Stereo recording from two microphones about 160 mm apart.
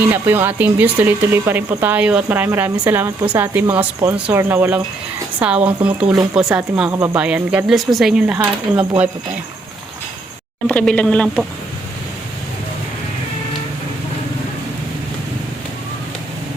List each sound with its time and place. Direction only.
0.1 s speech: 15° right (ahead or behind)
6.9 s speech: 20° right (ahead or behind)
7.2 s speech: 10° right (ahead or behind)
10.7 s speech: 10° left (ahead or behind)